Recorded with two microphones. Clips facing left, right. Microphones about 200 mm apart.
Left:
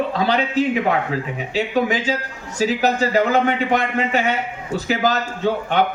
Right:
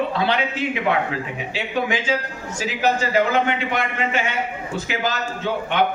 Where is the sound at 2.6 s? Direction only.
40° left (ahead or behind).